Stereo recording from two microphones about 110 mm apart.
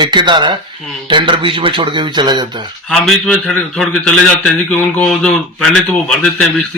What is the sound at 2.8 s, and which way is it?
Speech, 5° left (ahead or behind).